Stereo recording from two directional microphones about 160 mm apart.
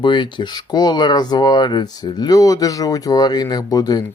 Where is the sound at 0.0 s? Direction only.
30° left (ahead or behind).